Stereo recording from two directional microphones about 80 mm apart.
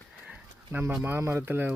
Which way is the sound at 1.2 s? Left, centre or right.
Right.